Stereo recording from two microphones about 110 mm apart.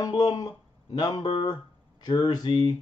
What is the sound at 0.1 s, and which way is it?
Speech, 35° left (ahead or behind).